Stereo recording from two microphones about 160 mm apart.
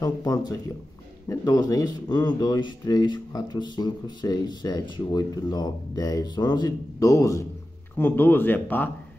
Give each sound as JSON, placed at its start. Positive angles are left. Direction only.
{"t": 0.0, "sound": "speech", "side_deg": 25}